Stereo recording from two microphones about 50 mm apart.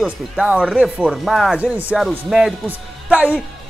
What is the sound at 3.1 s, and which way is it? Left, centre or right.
Speech, right.